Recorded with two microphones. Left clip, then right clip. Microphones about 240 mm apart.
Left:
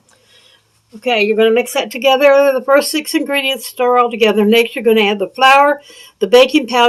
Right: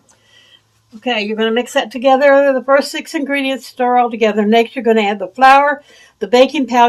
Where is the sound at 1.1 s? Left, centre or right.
Left.